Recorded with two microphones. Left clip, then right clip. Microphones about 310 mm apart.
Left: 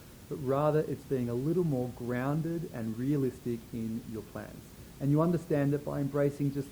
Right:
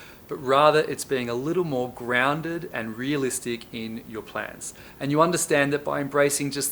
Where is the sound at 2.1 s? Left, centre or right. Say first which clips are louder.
Right 14 dB; centre.